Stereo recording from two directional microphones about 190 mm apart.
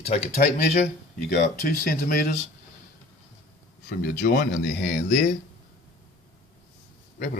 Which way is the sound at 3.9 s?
55° left (ahead or behind).